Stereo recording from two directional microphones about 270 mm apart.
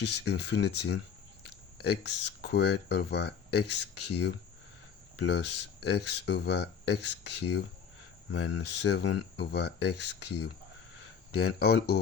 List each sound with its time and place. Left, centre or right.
0.0 s speech: left
1.5 s a sound: left
2.2 s speech: left
8.3 s speech: left